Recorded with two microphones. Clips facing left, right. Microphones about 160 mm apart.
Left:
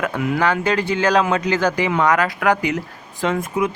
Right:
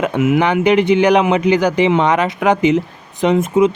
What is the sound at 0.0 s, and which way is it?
Speech, 20° right (ahead or behind).